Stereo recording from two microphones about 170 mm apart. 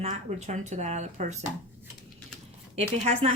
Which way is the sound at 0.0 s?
40° right (ahead or behind).